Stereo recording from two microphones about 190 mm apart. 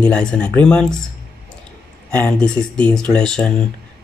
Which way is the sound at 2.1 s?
5° left (ahead or behind).